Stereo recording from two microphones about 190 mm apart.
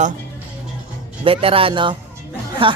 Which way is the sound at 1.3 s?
30° right (ahead or behind).